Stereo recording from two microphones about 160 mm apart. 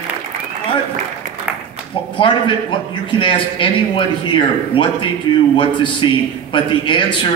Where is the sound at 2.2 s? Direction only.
35° left (ahead or behind).